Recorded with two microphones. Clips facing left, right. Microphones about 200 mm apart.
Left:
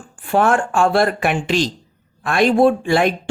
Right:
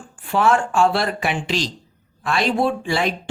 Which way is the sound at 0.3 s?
50° left (ahead or behind).